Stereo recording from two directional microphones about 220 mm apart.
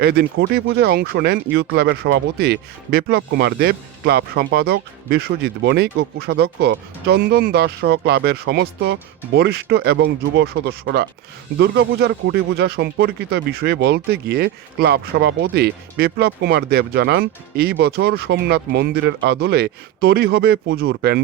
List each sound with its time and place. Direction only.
0.0 s speech: 45° right (ahead or behind)